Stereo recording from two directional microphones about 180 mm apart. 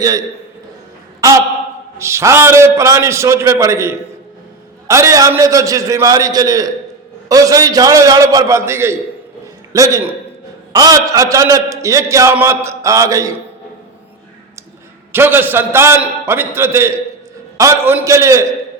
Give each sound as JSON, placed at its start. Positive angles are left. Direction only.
{"t": 2.0, "sound": "a man's voice", "side_deg": -15}
{"t": 15.1, "sound": "a man's voice", "side_deg": -10}